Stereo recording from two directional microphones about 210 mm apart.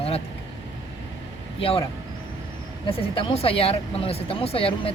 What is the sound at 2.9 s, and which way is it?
Speech, 25° left (ahead or behind).